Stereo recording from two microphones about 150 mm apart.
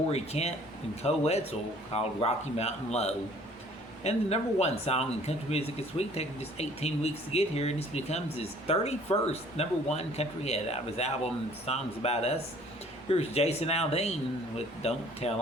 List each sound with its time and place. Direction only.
0.1 s speech: 45° left (ahead or behind)